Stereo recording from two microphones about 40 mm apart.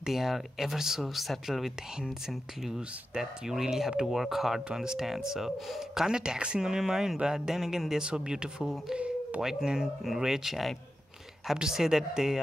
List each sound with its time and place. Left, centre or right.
0.0 s speech: centre; by 6.7 s right
6.7 s speech: centre
8.0 s speech: right